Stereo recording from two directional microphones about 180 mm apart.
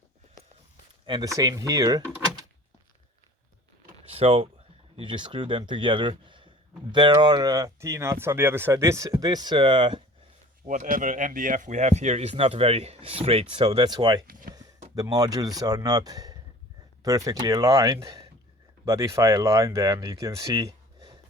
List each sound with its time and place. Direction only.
1.0 s speech: 25° right (ahead or behind)
4.1 s speech: 35° right (ahead or behind)
10.7 s speech: 45° right (ahead or behind); by 21.2 s 20° right (ahead or behind)